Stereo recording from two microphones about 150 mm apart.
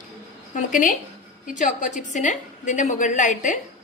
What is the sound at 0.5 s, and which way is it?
A woman's voice, 60° left (ahead or behind).